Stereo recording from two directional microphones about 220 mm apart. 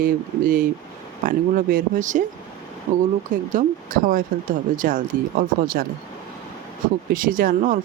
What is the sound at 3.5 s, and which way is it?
Speech, 40° right (ahead or behind).